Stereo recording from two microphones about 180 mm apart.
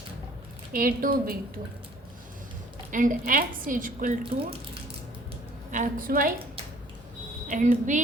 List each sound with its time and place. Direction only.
0.7 s a woman's voice: 50° right (ahead or behind)
2.9 s a woman's voice: 45° right (ahead or behind)
5.7 s a woman's voice: 50° right (ahead or behind)
7.4 s speech: 40° right (ahead or behind)